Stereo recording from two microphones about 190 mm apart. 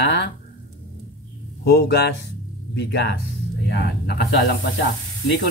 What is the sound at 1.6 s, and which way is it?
Speech, 60° left (ahead or behind).